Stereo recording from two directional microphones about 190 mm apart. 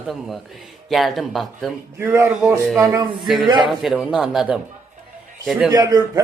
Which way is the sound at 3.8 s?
Centre (ahead or behind).